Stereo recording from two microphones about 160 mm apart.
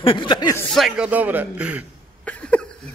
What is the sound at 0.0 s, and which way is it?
Speech, 30° left (ahead or behind).